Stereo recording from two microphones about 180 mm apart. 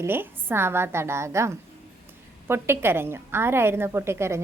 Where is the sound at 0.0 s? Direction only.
10° right (ahead or behind).